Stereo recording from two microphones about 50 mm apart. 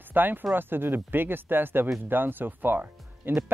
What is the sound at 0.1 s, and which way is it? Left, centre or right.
Speech, right.